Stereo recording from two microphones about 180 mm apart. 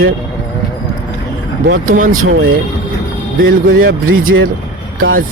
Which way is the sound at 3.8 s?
50° right (ahead or behind).